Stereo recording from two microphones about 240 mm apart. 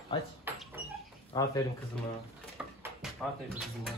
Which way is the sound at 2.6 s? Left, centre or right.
Centre.